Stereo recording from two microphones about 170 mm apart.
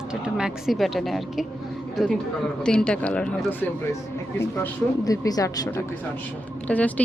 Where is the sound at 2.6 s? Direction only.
5° left (ahead or behind).